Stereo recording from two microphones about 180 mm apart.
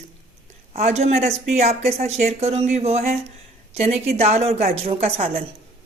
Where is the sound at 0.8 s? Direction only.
35° right (ahead or behind).